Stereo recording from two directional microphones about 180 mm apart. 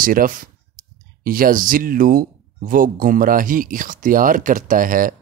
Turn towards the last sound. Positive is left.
turn(degrees=-50)  # may be behind; listen again after turning